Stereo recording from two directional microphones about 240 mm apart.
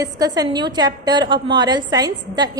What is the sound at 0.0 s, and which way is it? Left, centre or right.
A woman's voice, centre.